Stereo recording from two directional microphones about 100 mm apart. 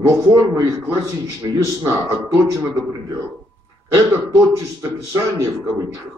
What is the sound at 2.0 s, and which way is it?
Speech, 30° right (ahead or behind).